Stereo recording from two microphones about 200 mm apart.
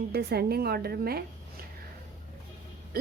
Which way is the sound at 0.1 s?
55° right (ahead or behind).